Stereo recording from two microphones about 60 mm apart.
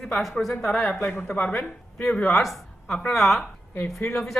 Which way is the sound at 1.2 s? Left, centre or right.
Left.